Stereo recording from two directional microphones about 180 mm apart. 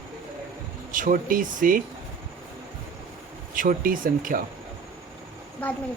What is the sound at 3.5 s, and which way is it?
Speech, 50° right (ahead or behind).